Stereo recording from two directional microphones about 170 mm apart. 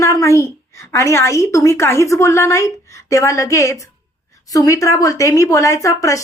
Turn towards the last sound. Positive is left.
turn(degrees=20)  # may be behind; listen again after turning